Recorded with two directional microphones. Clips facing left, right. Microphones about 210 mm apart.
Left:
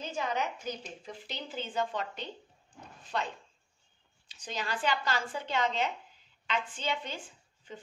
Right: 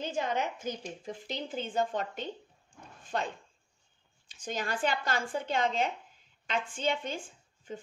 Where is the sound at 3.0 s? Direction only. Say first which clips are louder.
Right 1 dB; 50° right (ahead or behind).